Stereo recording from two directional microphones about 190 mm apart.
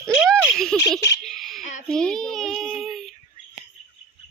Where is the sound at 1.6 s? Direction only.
40° left (ahead or behind).